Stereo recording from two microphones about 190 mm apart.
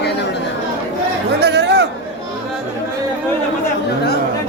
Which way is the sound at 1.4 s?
60° right (ahead or behind).